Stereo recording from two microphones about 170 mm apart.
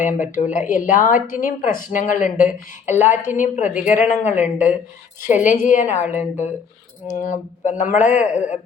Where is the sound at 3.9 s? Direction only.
45° left (ahead or behind).